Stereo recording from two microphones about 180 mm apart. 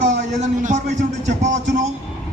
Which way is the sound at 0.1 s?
45° right (ahead or behind).